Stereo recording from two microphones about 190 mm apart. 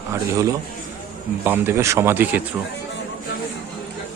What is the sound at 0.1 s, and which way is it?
Speech, 15° right (ahead or behind).